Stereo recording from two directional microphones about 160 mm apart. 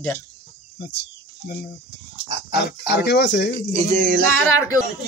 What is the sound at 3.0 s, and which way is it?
Speech, 90° left.